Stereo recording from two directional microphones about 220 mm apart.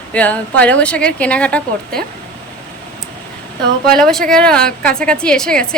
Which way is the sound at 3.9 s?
Centre (ahead or behind).